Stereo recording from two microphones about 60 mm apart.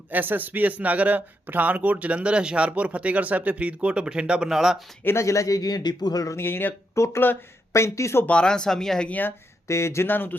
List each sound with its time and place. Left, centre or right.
0.1 s a man's voice: right; by 4.8 s centre
5.0 s speech: left
6.3 s speech: left
6.9 s speech: left
8.3 s speech: centre
9.0 s speech: left
9.6 s speech: left
10.1 s speech: left